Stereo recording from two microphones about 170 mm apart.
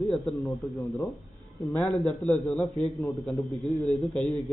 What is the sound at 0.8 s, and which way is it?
Speech, 20° left (ahead or behind).